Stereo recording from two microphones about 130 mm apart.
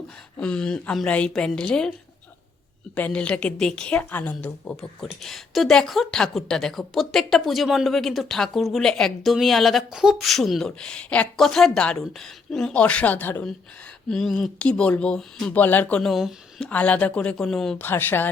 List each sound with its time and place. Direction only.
0.3 s speech: 5° left (ahead or behind)
2.9 s speech: 10° left (ahead or behind)
14.1 s speech: 5° left (ahead or behind)
17.8 s speech: 15° left (ahead or behind)